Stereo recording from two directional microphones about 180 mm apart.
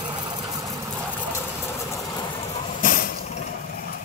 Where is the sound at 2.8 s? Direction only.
50° left (ahead or behind).